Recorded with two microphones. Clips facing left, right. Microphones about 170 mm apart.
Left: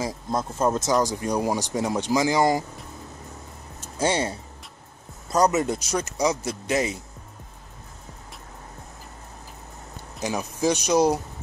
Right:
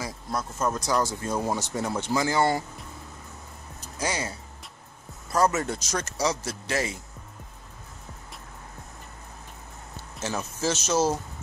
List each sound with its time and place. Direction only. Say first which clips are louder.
0.0 s speech: left 5 dB; 20° left (ahead or behind)
3.8 s speech: left 6 dB; 30° left (ahead or behind)
10.2 s speech: left 4 dB; 15° left (ahead or behind)